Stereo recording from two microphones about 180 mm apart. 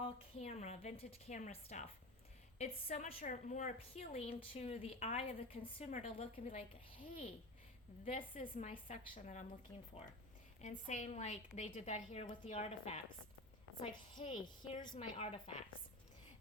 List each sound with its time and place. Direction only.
0.0 s a woman's voice: 35° left (ahead or behind)
2.9 s a woman's voice: 45° left (ahead or behind)
8.1 s a woman's voice: 45° left (ahead or behind)
10.6 s a woman's voice: 45° left (ahead or behind)
13.9 s a woman's voice: 25° left (ahead or behind)
14.9 s a woman's voice: 35° left (ahead or behind)